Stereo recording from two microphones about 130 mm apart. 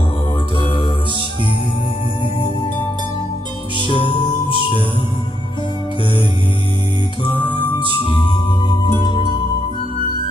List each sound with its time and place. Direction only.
0.6 s mantra: 40° left (ahead or behind)
3.8 s music: 40° left (ahead or behind)
7.9 s music: 40° left (ahead or behind)